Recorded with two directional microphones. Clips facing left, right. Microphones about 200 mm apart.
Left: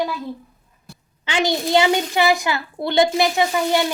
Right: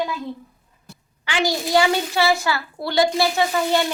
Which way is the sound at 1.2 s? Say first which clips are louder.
Left 2 dB; 20° left (ahead or behind).